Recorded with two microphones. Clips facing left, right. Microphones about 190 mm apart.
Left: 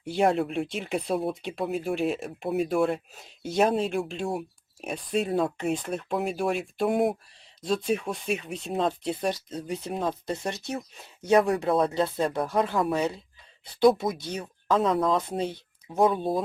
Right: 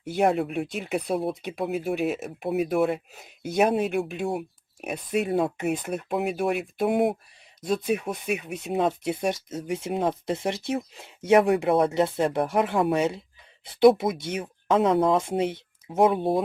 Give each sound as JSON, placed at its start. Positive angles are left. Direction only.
{"t": 0.2, "sound": "speech", "side_deg": 0}
{"t": 9.5, "sound": "speech", "side_deg": -20}